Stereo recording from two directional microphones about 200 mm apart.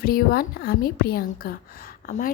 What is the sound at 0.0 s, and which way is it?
A woman's voice, 50° left (ahead or behind).